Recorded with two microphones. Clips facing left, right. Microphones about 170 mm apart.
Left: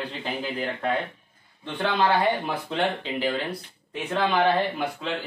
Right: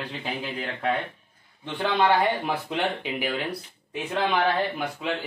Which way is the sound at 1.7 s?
10° right (ahead or behind).